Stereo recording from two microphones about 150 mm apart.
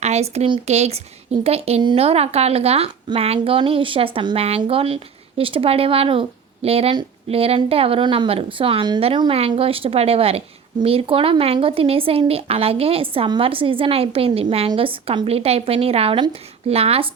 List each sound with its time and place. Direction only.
0.0 s a woman's voice: 45° right (ahead or behind)